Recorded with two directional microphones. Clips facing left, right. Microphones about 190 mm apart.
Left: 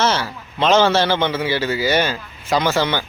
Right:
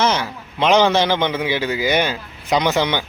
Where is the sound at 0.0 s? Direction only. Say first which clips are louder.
Even; 15° right (ahead or behind).